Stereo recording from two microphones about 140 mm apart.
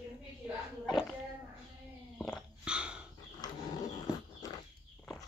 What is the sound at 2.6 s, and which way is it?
Dog, 5° right (ahead or behind).